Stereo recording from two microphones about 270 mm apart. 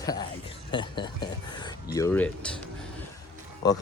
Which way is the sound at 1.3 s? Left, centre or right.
Centre.